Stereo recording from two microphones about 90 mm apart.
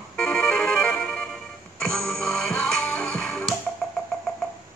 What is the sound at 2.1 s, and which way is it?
Music, 5° left (ahead or behind).